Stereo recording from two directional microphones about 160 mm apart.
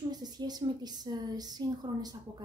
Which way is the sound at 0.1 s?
25° right (ahead or behind).